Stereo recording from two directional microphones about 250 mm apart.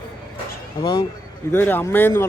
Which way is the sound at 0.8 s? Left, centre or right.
Centre.